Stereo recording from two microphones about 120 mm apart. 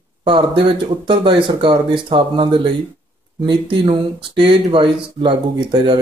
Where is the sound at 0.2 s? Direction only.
45° right (ahead or behind).